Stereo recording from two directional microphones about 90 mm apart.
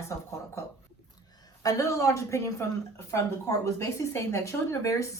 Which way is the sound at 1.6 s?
35° left (ahead or behind).